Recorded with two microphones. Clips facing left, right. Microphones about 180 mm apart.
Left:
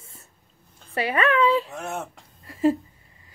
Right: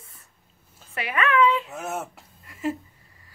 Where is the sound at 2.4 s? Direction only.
30° left (ahead or behind).